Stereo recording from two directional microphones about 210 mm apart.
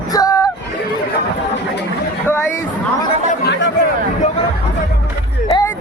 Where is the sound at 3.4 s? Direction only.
55° left (ahead or behind).